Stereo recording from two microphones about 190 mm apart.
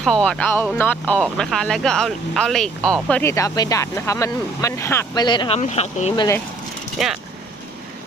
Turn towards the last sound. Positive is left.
turn(degrees=0)  # may be behind; listen again after turning